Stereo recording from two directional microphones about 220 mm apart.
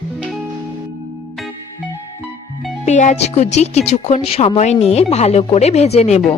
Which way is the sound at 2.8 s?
35° left (ahead or behind).